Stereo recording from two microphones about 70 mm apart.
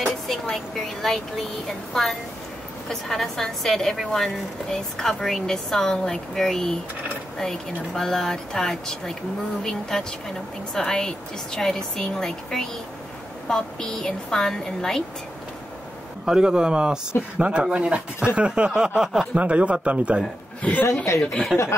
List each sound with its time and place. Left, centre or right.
0.0 s music: centre
1.0 s a woman's voice: centre
16.3 s speech: centre
21.2 s speech: centre